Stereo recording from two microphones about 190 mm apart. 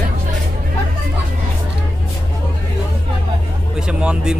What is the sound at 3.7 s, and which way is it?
Speech, 5° right (ahead or behind).